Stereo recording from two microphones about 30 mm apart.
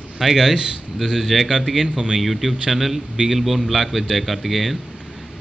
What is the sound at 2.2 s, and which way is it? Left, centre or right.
A man's voice, centre.